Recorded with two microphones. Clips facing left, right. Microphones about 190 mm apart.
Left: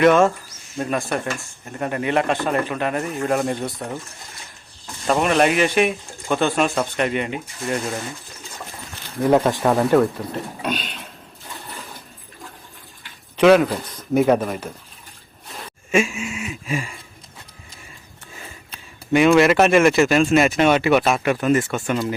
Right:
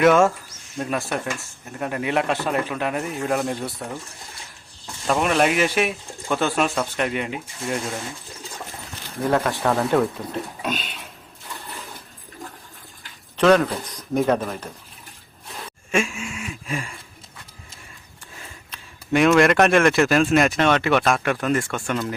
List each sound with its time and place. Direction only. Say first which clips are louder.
0.0 s speech: left 1 dB; 5° right (ahead or behind)
5.0 s speech: left 2 dB; centre (ahead or behind)
9.4 s speech: left 4 dB; 20° left (ahead or behind)
10.0 s speech: left 3 dB; centre (ahead or behind)
13.3 s speech: left 3 dB; 5° left (ahead or behind)
15.9 s a sound: left 4 dB; 5° left (ahead or behind)
19.1 s speech: left 2 dB; centre (ahead or behind)